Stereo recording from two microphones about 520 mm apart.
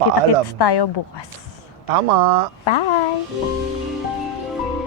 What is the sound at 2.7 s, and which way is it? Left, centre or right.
Speech, left.